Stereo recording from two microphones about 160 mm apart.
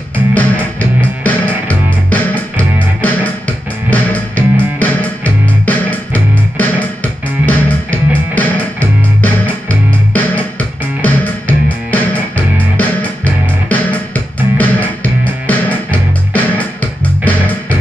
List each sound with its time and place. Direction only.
0.3 s music: 10° left (ahead or behind)